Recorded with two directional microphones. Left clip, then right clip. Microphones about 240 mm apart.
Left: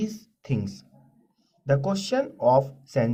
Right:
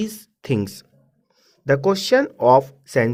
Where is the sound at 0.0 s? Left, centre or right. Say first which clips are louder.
Right 4 dB; right.